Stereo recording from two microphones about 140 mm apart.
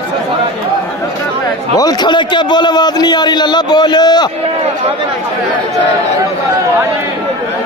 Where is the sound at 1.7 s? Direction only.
30° left (ahead or behind).